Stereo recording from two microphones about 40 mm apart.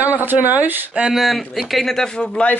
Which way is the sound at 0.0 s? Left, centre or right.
Right.